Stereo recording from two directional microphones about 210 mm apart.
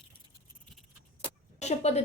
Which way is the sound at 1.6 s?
30° left (ahead or behind).